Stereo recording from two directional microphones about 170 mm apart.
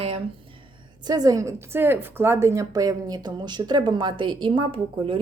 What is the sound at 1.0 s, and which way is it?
A woman's voice, 20° right (ahead or behind).